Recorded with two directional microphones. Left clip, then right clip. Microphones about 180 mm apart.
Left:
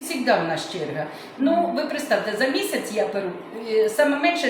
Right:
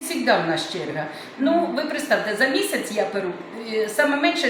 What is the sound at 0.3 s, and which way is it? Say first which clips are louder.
A woman's voice: right 1 dB; centre (ahead or behind).